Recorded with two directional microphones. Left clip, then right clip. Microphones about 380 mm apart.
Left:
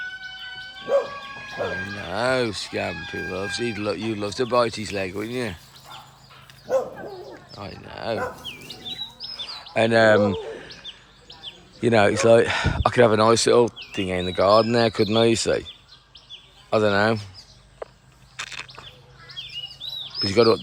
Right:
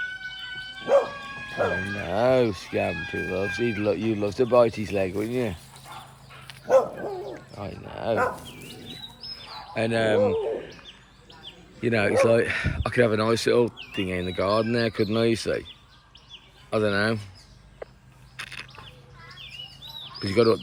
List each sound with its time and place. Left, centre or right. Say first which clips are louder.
1.6 s speech: right 2 dB; centre
6.5 s dog: right 4 dB; centre
7.5 s a sound: even; centre
7.9 s dog: right 3 dB; centre
9.7 s speech: left 7 dB; centre
10.2 s bird: even; left
11.3 s bird: left 5 dB; left
11.9 s speech: left 4 dB; centre
16.6 s speech: left 4 dB; centre
18.3 s a sound: left 4 dB; centre
20.1 s speech: left 3 dB; centre